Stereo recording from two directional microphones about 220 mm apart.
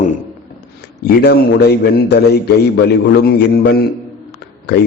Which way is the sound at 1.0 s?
45° left (ahead or behind).